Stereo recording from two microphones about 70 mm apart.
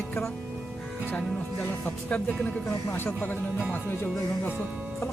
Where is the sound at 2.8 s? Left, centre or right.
Left.